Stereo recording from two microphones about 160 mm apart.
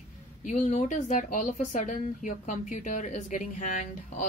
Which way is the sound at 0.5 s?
50° left (ahead or behind).